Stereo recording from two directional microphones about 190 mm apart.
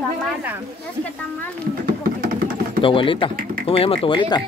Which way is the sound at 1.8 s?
50° right (ahead or behind).